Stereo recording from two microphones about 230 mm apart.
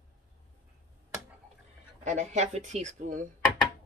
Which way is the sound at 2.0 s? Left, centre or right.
Right.